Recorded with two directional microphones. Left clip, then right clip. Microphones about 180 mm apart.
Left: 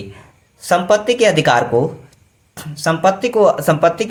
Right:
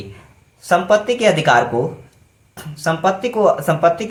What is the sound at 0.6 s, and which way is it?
Speech, 40° left (ahead or behind).